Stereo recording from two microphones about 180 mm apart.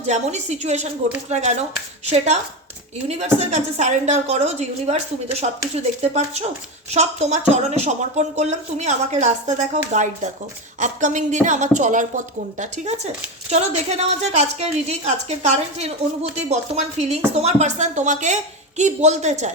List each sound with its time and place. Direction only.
0.0 s a woman's voice: 40° right (ahead or behind)
17.0 s speech: 35° right (ahead or behind)